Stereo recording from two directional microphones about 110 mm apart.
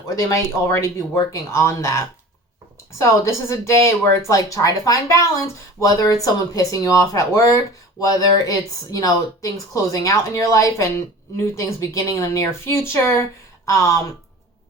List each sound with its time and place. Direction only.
0.2 s speech: 30° left (ahead or behind)
3.0 s speech: 25° left (ahead or behind)